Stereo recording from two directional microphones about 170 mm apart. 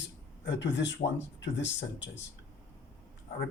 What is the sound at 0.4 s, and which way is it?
Speech, 90° left.